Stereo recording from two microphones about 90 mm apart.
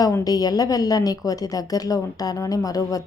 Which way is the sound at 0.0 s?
45° left (ahead or behind).